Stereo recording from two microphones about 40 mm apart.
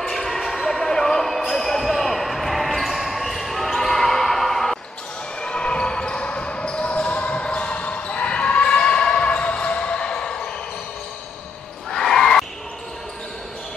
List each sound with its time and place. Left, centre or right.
0.0 s basketball bounce: centre
0.7 s basketball bounce: centre
5.4 s basketball bounce: left
11.9 s a sound: centre